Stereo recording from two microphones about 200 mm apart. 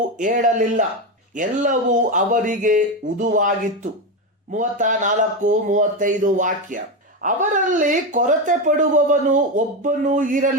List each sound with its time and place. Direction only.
0.2 s speech: 40° right (ahead or behind)